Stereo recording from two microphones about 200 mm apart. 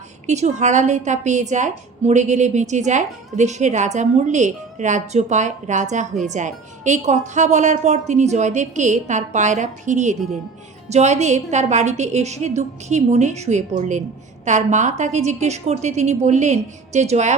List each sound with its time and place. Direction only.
0.3 s a woman's voice: 35° right (ahead or behind)